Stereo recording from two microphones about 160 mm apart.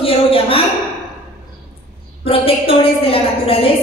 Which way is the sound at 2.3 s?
35° left (ahead or behind).